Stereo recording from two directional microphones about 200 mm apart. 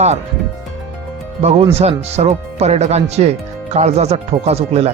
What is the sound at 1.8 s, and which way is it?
Speech, 30° right (ahead or behind).